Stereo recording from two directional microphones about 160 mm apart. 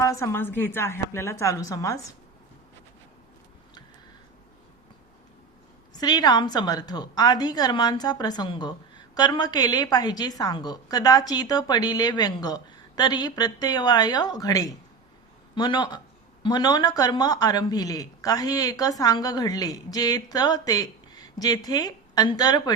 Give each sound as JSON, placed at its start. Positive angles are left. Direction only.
{"t": 0.0, "sound": "a woman's voice", "side_deg": 20}
{"t": 5.9, "sound": "speech", "side_deg": 25}